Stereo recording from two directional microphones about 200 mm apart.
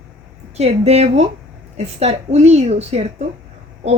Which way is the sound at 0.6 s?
30° right (ahead or behind).